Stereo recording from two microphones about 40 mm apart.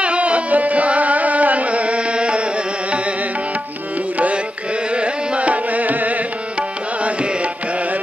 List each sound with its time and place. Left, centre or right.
0.0 s carnatic music: right
4.9 s carnatic music: right